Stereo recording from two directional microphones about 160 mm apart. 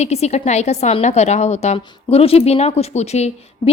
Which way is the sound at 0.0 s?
40° left (ahead or behind).